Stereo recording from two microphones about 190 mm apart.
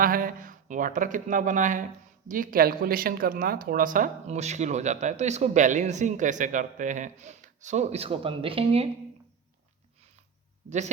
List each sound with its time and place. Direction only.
0.0 s speech: 50° right (ahead or behind); by 8.9 s 30° right (ahead or behind)
10.7 s speech: 40° right (ahead or behind)